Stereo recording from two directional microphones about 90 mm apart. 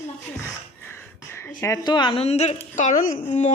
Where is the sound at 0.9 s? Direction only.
25° left (ahead or behind).